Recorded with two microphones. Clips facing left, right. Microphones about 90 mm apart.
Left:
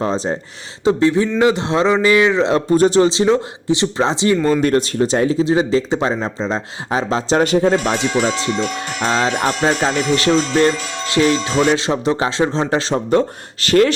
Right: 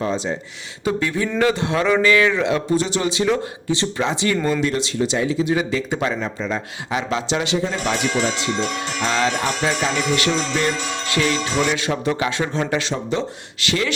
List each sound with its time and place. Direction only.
0.0 s speech: 35° left (ahead or behind)
0.9 s speech: 25° left (ahead or behind)
2.6 s speech: 45° left (ahead or behind); by 4.4 s 25° left (ahead or behind)
4.6 s speech: 50° left (ahead or behind)
5.5 s speech: 30° left (ahead or behind); by 7.9 s 45° left (ahead or behind)
7.9 s speech: 30° left (ahead or behind)
13.1 s speech: 45° left (ahead or behind)